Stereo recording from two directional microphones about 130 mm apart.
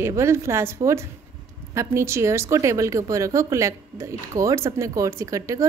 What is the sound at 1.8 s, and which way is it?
A woman's voice, 20° right (ahead or behind).